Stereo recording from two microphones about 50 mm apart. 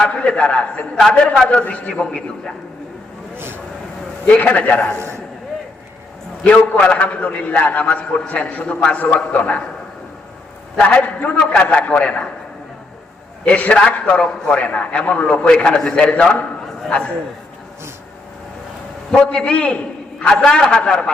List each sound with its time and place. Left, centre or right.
0.0 s a man's voice: left
3.3 s vehicle: right
4.3 s a man's voice: left
4.9 s a man's voice: right
6.4 s a man's voice: left
10.8 s a man's voice: left
13.4 s a man's voice: left
19.1 s a man's voice: centre